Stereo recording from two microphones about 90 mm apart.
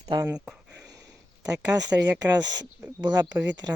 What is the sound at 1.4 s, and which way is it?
Speech, 15° right (ahead or behind).